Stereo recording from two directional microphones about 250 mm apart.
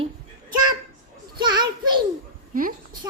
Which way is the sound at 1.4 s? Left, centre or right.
Centre.